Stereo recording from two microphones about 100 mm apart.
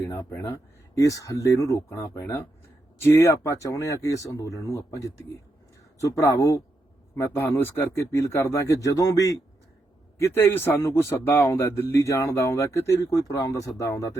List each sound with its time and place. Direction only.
0.0 s speech: 25° left (ahead or behind)
0.9 s a man's voice: 35° left (ahead or behind)